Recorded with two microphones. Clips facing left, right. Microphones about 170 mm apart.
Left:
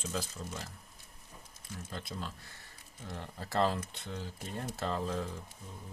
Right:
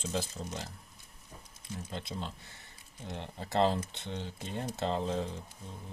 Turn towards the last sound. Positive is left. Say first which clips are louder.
# right 3 dB
turn(degrees=-25)  # may be behind; listen again after turning